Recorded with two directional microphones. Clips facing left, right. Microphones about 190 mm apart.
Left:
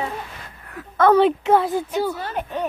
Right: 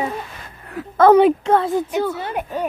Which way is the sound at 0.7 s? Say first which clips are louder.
Right 4 dB; 30° right (ahead or behind).